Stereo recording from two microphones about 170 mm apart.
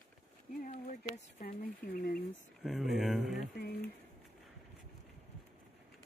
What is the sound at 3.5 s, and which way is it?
Speech, 70° left (ahead or behind).